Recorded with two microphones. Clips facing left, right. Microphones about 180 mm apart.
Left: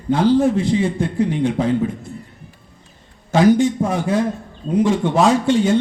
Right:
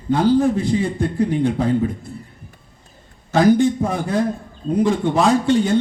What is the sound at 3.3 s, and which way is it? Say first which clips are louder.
Speech: left 1 dB; 50° right (ahead or behind).